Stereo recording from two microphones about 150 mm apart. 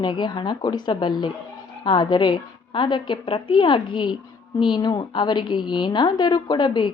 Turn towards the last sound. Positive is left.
turn(degrees=30)  # may be behind; listen again after turning